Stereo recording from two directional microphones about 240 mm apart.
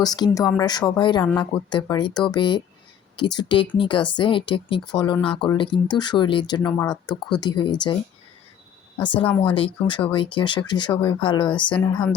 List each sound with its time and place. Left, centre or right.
0.0 s speech: centre
6.7 s speech: centre
9.2 s speech: centre
9.5 s speech: left